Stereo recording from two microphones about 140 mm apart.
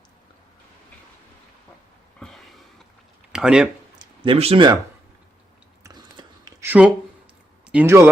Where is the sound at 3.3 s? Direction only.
5° right (ahead or behind).